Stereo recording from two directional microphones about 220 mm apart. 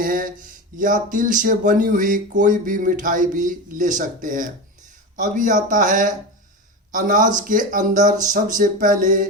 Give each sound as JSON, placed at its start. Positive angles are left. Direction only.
{"t": 0.0, "sound": "speech", "side_deg": -40}